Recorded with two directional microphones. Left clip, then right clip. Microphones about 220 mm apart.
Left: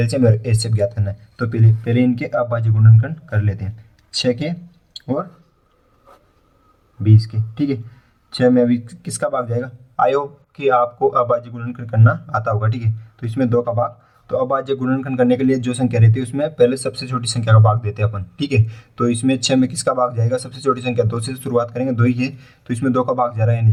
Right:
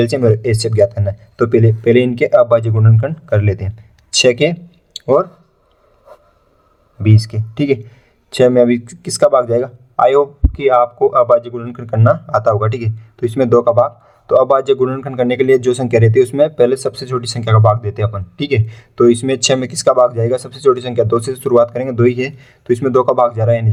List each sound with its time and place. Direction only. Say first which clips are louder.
0.0 s a man's voice: right 5 dB; 35° right (ahead or behind)
7.0 s a man's voice: right 4 dB; 45° right (ahead or behind)